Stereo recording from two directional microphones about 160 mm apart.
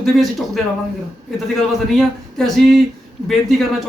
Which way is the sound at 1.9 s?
Centre (ahead or behind).